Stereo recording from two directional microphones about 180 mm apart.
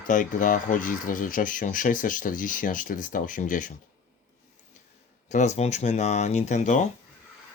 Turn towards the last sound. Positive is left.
turn(degrees=40)  # may be behind; listen again after turning